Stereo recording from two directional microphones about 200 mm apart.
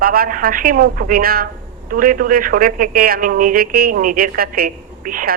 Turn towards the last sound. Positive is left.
turn(degrees=-45)  # may be behind; listen again after turning